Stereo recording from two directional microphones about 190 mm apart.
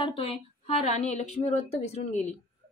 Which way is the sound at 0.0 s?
30° left (ahead or behind).